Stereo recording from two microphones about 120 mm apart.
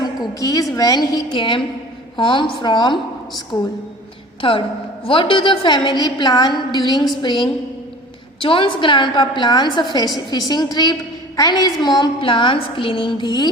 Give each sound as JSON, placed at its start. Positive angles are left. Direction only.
{"t": 0.0, "sound": "a woman's voice", "side_deg": 30}
{"t": 1.3, "sound": "a woman's voice", "side_deg": 45}